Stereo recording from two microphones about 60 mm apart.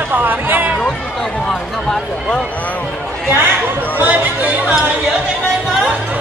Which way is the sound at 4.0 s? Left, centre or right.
Right.